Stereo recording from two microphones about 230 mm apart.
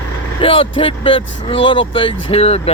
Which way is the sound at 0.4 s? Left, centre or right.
Left.